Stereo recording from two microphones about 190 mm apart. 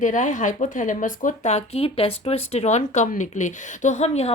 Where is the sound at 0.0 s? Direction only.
40° left (ahead or behind).